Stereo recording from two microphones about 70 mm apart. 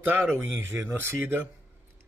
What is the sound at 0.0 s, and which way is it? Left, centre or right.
Speech, right.